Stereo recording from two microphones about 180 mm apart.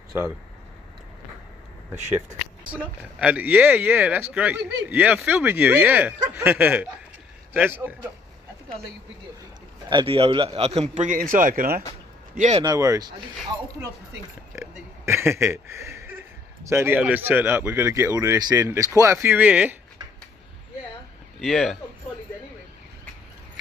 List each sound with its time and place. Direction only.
2.8 s speech: 5° right (ahead or behind)
9.8 s a man's voice: 25° right (ahead or behind); by 11.8 s 50° right (ahead or behind)
12.4 s a man's voice: 40° right (ahead or behind)
12.6 s speech: 20° right (ahead or behind)
14.5 s speech: 15° right (ahead or behind)
21.4 s speech: centre (ahead or behind)